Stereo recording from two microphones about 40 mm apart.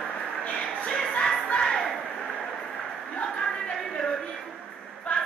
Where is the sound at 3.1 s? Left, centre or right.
Left.